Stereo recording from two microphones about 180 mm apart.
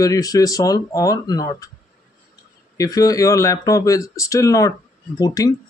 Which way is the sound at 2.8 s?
20° left (ahead or behind).